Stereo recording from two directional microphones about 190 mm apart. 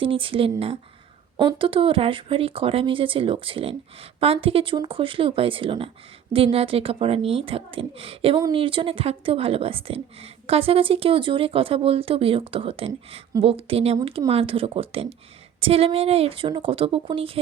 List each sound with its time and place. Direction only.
0.0 s speech: 30° right (ahead or behind)